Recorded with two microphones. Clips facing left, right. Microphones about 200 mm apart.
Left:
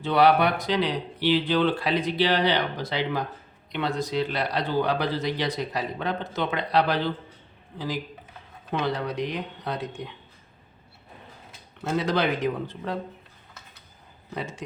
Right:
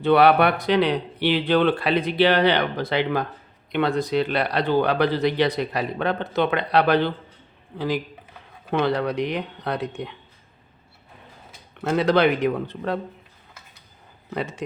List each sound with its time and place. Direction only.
0.0 s speech: 60° right (ahead or behind)
11.8 s speech: 60° right (ahead or behind)
14.3 s speech: 60° right (ahead or behind)